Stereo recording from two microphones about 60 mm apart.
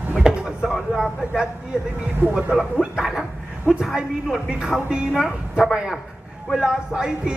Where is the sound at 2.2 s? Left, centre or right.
Centre.